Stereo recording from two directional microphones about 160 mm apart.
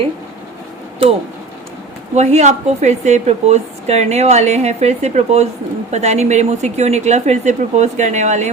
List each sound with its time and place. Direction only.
2.1 s a woman's voice: 45° right (ahead or behind)